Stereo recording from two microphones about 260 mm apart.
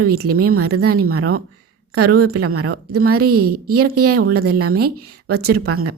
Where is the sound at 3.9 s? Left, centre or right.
Right.